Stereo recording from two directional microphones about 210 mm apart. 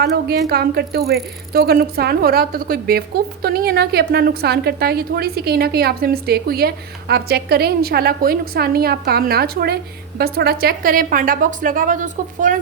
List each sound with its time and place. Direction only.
0.0 s a woman's voice: 50° right (ahead or behind)